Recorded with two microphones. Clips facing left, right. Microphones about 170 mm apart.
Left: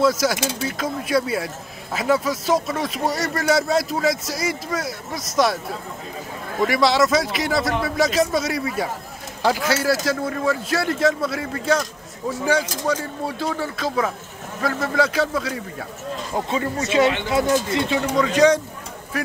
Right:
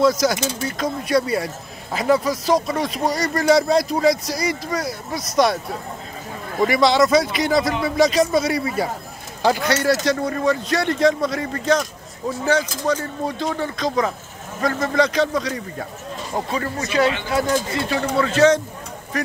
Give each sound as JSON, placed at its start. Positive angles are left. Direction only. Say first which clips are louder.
{"t": 0.0, "sound": "speech", "louder": "right 2 dB", "side_deg": 5}
{"t": 6.6, "sound": "speech", "louder": "right 2 dB", "side_deg": 0}
{"t": 16.4, "sound": "speech", "louder": "left 2 dB", "side_deg": 20}